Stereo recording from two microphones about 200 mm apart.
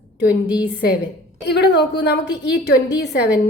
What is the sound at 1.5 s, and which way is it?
A woman's voice, 60° left (ahead or behind).